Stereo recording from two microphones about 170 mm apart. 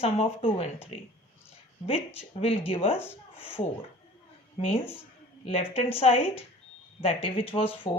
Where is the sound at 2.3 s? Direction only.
35° left (ahead or behind).